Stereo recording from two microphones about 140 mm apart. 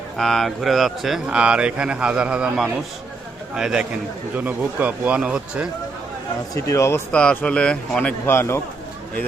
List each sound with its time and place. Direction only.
0.2 s a man's voice: centre (ahead or behind)
6.5 s speech: 20° left (ahead or behind)
7.1 s a man's voice: 10° left (ahead or behind)